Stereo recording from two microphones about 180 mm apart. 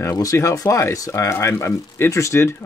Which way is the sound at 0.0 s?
20° left (ahead or behind).